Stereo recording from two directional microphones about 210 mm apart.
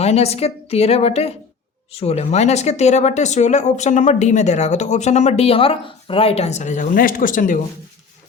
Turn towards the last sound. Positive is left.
turn(degrees=40)  # may be behind; listen again after turning